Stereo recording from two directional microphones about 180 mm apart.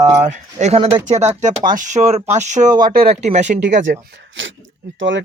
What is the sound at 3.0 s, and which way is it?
Speech, 35° right (ahead or behind).